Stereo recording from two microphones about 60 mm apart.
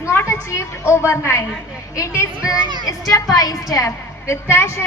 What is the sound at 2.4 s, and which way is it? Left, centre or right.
A woman's voice, left.